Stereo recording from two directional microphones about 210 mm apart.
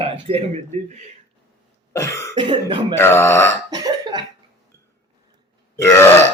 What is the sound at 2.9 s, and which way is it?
Speech, 10° left (ahead or behind).